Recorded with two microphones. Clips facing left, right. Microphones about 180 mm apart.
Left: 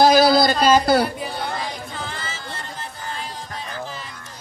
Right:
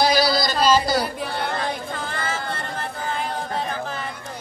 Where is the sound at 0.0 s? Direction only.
50° left (ahead or behind).